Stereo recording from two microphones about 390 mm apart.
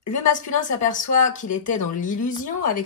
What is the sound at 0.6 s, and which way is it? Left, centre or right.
Speech, centre.